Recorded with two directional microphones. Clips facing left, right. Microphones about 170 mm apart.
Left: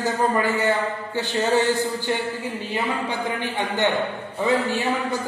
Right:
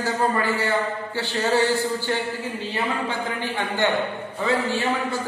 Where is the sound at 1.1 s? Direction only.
15° left (ahead or behind).